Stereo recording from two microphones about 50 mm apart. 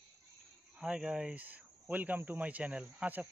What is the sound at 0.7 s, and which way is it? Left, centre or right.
Speech, centre.